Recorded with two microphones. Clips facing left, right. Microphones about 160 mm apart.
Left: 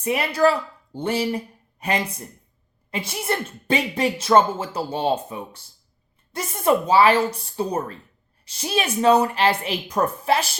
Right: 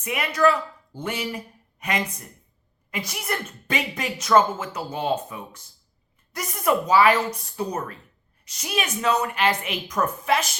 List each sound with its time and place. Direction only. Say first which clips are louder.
0.0 s a woman's voice: left 2 dB; 30° left (ahead or behind)